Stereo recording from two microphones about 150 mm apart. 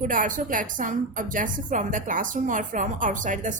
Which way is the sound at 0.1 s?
60° right (ahead or behind).